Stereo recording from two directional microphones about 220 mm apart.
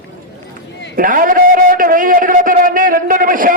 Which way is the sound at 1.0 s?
40° right (ahead or behind).